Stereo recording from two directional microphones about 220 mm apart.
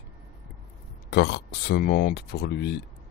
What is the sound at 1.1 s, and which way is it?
Speech, 50° left (ahead or behind).